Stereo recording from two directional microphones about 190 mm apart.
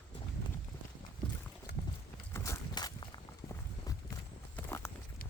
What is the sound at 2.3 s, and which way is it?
Walk, 15° left (ahead or behind).